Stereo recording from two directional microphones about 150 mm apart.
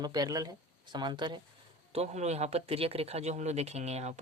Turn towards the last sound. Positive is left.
turn(degrees=-45)  # may be behind; listen again after turning